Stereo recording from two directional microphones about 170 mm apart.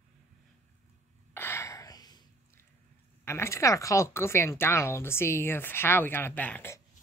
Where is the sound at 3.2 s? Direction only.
15° left (ahead or behind).